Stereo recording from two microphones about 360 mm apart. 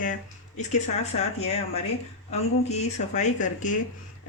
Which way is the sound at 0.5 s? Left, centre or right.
Centre.